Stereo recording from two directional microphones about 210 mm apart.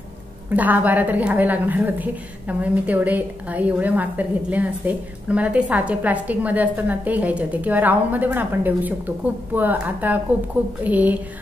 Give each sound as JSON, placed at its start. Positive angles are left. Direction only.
{"t": 0.6, "sound": "a woman's voice", "side_deg": -10}